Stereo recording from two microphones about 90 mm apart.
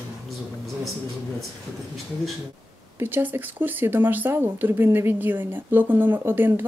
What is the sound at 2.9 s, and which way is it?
Speech, 20° right (ahead or behind).